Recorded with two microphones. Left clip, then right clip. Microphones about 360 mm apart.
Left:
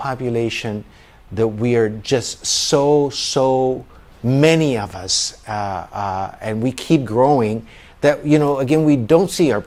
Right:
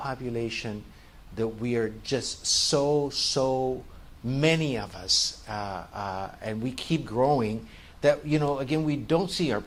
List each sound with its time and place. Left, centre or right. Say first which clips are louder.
0.0 s speech: left 11 dB; left